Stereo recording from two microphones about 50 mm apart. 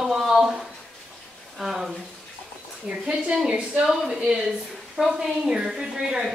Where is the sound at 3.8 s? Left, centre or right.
Centre.